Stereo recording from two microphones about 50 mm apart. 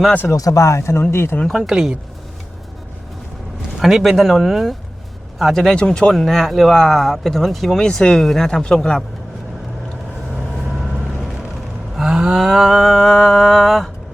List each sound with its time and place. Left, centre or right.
0.3 s speech: left
1.1 s speech: left
1.5 s speech: centre
3.8 s speech: centre
6.1 s speech: centre
7.8 s speech: centre
11.9 s a sound: centre
12.4 s speech: centre